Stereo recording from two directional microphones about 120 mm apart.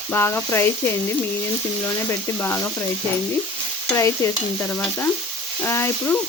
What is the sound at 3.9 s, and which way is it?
Stir, 25° left (ahead or behind).